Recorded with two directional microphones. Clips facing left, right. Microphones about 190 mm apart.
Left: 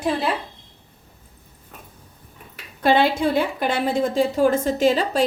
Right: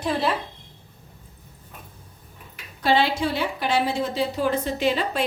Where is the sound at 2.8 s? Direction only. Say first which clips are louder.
Left 3 dB; 55° left (ahead or behind).